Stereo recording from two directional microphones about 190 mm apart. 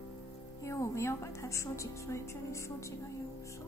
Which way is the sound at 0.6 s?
15° left (ahead or behind).